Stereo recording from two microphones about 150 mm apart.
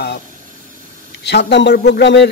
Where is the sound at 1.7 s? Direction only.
90° left.